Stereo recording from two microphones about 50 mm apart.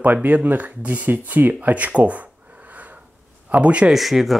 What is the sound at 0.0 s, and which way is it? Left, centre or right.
Speech, right.